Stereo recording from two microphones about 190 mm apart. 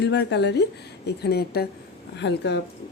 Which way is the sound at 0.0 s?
60° left (ahead or behind).